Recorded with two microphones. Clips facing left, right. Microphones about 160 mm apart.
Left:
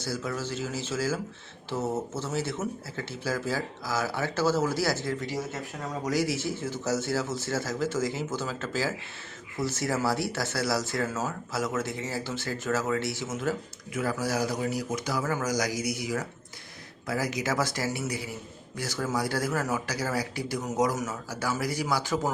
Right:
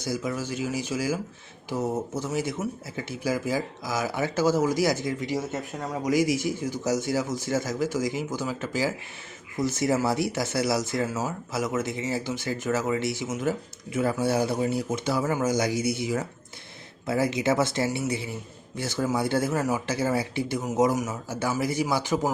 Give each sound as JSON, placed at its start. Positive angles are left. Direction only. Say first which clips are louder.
{"t": 0.0, "sound": "speech", "louder": "right 3 dB", "side_deg": -15}